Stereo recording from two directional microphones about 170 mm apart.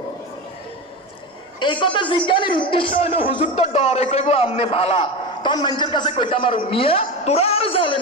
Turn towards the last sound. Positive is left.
turn(degrees=30)  # may be behind; listen again after turning